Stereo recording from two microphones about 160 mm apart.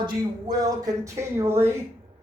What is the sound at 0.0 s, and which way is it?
Speech, 25° right (ahead or behind).